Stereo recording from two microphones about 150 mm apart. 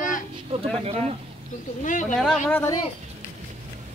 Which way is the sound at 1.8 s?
60° left (ahead or behind).